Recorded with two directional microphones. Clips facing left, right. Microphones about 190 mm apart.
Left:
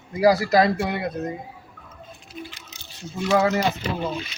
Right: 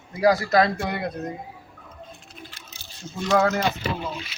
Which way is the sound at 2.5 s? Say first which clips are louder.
Left 4 dB; 15° left (ahead or behind).